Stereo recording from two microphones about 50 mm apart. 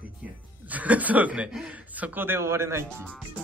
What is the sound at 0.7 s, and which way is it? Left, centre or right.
Speech, right.